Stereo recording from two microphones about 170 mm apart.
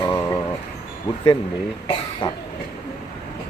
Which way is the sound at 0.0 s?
15° left (ahead or behind).